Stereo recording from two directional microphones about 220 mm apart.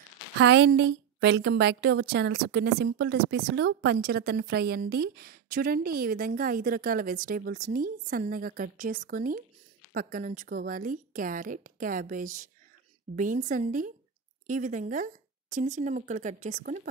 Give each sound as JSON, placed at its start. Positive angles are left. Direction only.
{"t": 0.4, "sound": "a woman's voice", "side_deg": -60}